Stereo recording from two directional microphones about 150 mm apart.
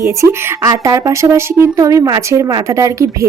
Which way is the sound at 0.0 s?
20° right (ahead or behind).